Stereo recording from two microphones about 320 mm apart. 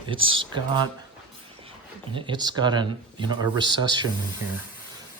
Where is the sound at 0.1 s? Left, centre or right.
Centre.